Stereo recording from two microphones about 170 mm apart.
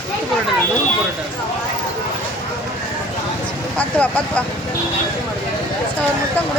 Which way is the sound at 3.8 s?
10° left (ahead or behind).